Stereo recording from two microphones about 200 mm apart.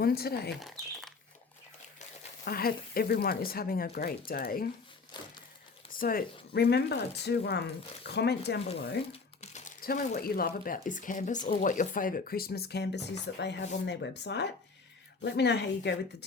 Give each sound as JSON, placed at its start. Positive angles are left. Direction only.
{"t": 0.0, "sound": "speech", "side_deg": 50}
{"t": 0.6, "sound": "speech", "side_deg": 0}
{"t": 2.0, "sound": "speech", "side_deg": 45}
{"t": 5.1, "sound": "a sound", "side_deg": 20}
{"t": 6.0, "sound": "speech", "side_deg": 45}
{"t": 9.1, "sound": "crumpling", "side_deg": 35}
{"t": 10.2, "sound": "speech", "side_deg": 50}